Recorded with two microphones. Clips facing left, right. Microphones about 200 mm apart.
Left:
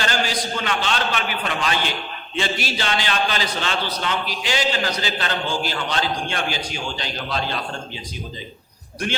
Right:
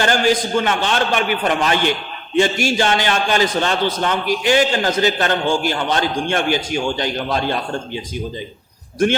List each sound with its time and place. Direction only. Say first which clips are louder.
0.0 s a man's voice: right 8 dB; 50° right (ahead or behind)